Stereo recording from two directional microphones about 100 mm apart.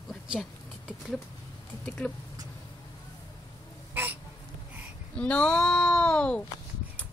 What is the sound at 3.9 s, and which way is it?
Hiccup, 20° right (ahead or behind).